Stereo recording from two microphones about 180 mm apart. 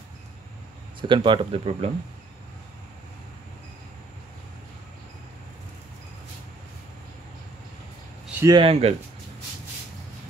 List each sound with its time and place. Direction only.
1.0 s speech: 25° right (ahead or behind)
8.4 s speech: 25° right (ahead or behind)